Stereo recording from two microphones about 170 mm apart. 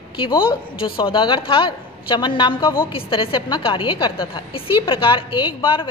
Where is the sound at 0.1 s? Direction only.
30° left (ahead or behind).